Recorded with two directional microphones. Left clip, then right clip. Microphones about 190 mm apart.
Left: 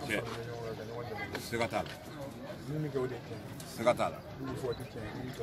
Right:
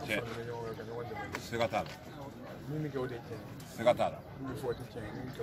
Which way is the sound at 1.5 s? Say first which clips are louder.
Right 1 dB; 45° right (ahead or behind).